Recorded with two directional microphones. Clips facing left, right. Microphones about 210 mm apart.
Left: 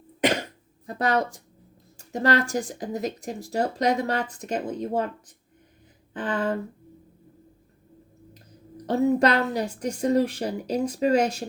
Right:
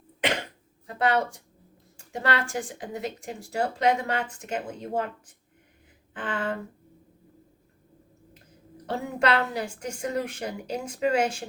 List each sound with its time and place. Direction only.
0.9 s speech: 40° left (ahead or behind)
6.1 s speech: 35° left (ahead or behind)
8.9 s speech: 40° left (ahead or behind)